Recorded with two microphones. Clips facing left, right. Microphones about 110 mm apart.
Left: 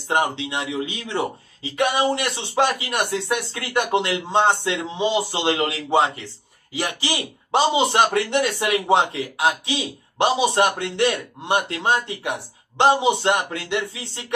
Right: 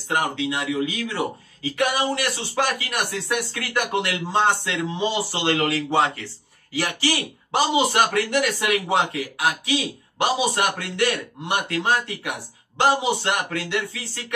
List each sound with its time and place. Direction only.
0.1 s speech: 25° left (ahead or behind)